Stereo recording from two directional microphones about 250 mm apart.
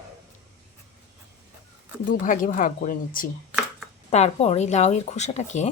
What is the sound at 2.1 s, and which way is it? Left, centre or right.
Speech, left.